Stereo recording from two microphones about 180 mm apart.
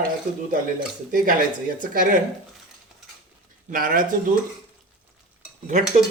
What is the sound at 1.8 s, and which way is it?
Speech, 45° right (ahead or behind).